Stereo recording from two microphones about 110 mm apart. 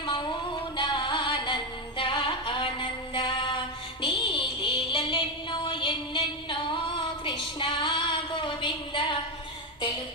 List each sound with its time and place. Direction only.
0.0 s music: 45° left (ahead or behind)